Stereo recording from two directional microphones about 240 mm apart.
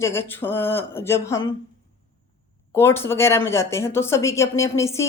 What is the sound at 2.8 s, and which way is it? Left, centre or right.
Speech, centre.